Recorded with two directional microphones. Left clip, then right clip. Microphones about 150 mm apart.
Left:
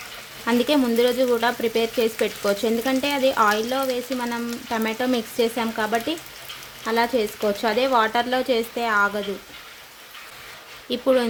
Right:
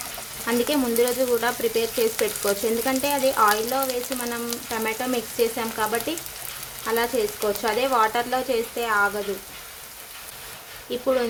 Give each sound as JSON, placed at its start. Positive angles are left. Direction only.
{"t": 0.4, "sound": "frying", "side_deg": 30}
{"t": 2.2, "sound": "speech", "side_deg": 30}
{"t": 10.8, "sound": "speech", "side_deg": 35}